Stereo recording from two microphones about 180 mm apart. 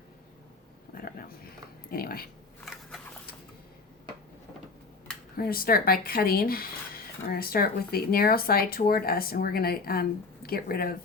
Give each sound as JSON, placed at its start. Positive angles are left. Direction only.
{"t": 0.9, "sound": "a sound", "side_deg": 55}
{"t": 1.9, "sound": "speech", "side_deg": 55}
{"t": 5.4, "sound": "speech", "side_deg": 55}